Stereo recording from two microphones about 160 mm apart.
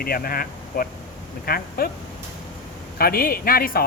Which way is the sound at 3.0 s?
65° left (ahead or behind).